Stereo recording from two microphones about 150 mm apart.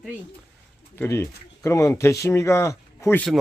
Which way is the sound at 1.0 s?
15° left (ahead or behind).